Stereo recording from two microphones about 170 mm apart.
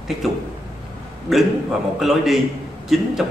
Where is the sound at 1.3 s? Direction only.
Centre (ahead or behind).